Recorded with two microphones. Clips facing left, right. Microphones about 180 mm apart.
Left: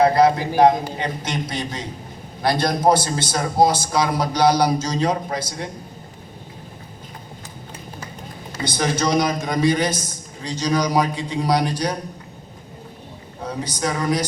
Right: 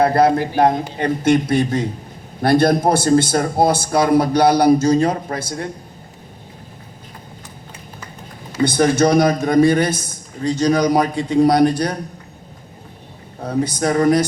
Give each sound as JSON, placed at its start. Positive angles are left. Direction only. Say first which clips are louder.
{"t": 0.1, "sound": "a man's voice", "louder": "right 2 dB", "side_deg": -55}
{"t": 8.6, "sound": "a man's voice", "louder": "right 7 dB", "side_deg": -55}
{"t": 13.4, "sound": "a man's voice", "louder": "right 6 dB", "side_deg": -55}